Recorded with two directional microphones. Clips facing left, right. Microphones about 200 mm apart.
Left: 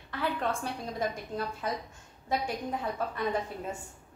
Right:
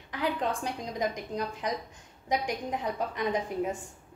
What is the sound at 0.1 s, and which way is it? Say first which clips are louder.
A woman's voice: right 1 dB; 15° right (ahead or behind).